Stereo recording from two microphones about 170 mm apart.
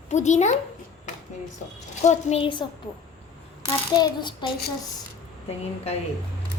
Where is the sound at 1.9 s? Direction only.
45° left (ahead or behind).